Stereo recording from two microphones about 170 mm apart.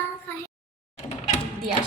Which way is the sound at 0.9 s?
40° left (ahead or behind).